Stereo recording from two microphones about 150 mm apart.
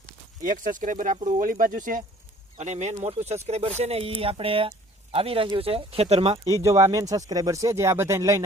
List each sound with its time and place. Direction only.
0.4 s speech: 60° right (ahead or behind)
2.6 s speech: 50° right (ahead or behind)
6.4 s speech: 20° right (ahead or behind)